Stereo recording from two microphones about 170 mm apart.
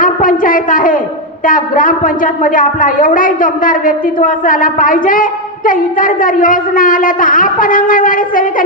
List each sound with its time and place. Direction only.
0.0 s a woman's voice: 55° left (ahead or behind)